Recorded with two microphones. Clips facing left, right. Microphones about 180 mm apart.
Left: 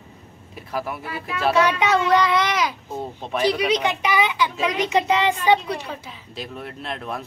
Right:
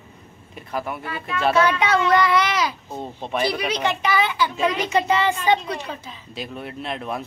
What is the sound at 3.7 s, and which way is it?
Speech, 15° left (ahead or behind).